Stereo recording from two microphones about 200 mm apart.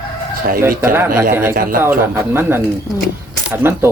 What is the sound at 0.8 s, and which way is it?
Speech, 10° right (ahead or behind).